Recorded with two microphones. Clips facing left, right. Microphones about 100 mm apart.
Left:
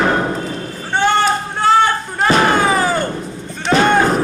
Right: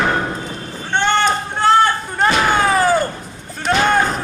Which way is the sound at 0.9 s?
5° left (ahead or behind).